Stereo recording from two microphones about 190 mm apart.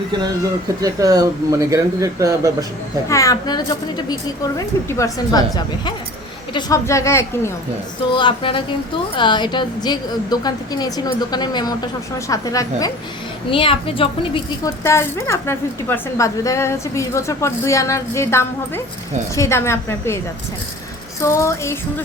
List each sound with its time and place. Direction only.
0.8 s speech: 20° right (ahead or behind)
3.1 s a woman's voice: 15° left (ahead or behind)
8.1 s a woman's voice: 25° left (ahead or behind)
14.8 s a woman's voice: 15° left (ahead or behind)
21.2 s a woman's voice: 15° left (ahead or behind)